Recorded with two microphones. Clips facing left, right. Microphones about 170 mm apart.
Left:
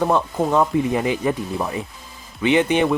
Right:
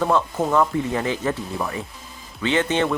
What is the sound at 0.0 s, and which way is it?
Speech, 15° left (ahead or behind).